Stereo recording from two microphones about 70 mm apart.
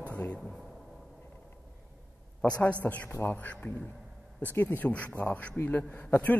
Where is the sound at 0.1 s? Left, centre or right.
Left.